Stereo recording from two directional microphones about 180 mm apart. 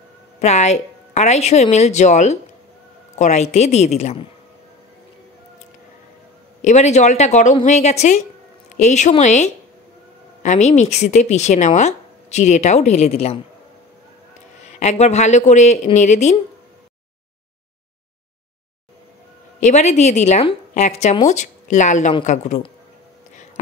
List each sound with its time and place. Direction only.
0.4 s a woman's voice: 40° left (ahead or behind)
6.6 s speech: 40° left (ahead or behind)
14.8 s speech: 40° left (ahead or behind)
19.6 s speech: 40° left (ahead or behind)